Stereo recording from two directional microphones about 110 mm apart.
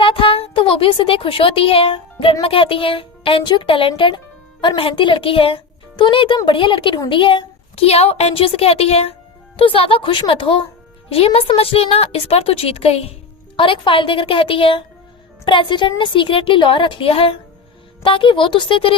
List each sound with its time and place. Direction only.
0.0 s a woman's voice: 55° left (ahead or behind)
7.1 s a sound: 50° left (ahead or behind)
7.9 s a woman's voice: 70° left (ahead or behind)
9.6 s a woman's voice: 55° left (ahead or behind)
13.6 s speech: 50° left (ahead or behind)